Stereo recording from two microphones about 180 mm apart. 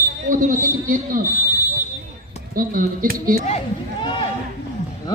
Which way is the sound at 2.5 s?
50° right (ahead or behind).